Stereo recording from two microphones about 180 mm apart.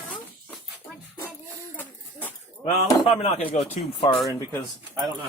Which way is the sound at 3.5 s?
40° left (ahead or behind).